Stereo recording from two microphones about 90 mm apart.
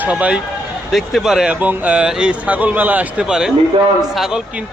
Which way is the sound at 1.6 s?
15° right (ahead or behind).